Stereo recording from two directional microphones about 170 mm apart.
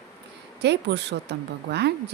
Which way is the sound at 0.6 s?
90° right.